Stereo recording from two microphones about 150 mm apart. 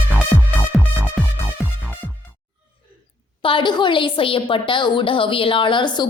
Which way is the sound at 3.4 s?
35° left (ahead or behind).